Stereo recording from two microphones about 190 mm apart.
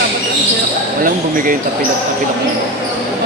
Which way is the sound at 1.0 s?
45° right (ahead or behind).